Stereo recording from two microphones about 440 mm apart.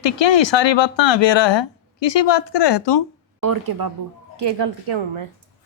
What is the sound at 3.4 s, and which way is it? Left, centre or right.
Speech, right.